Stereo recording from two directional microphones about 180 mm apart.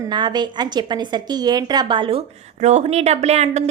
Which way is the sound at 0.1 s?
25° right (ahead or behind).